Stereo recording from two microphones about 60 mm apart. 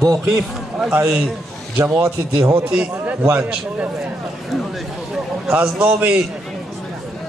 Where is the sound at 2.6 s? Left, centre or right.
Centre.